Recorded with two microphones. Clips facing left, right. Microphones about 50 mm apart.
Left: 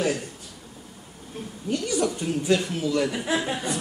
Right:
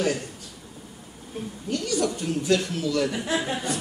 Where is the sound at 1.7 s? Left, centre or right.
Centre.